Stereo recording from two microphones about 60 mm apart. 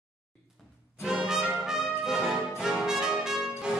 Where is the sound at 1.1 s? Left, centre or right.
Centre.